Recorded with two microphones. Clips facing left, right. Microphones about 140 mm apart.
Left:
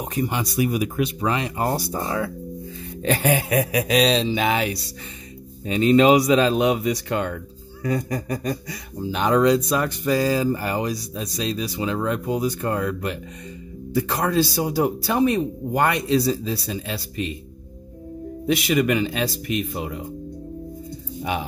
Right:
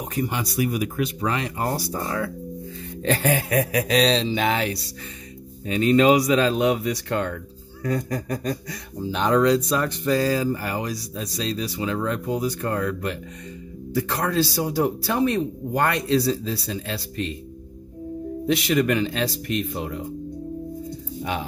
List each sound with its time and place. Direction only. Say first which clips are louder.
0.0 s speech: left 2 dB; 20° left (ahead or behind)
5.7 s speech: left 2 dB; 20° left (ahead or behind)
18.5 s speech: left 1 dB; 10° left (ahead or behind)
21.2 s speech: left 2 dB; 10° left (ahead or behind)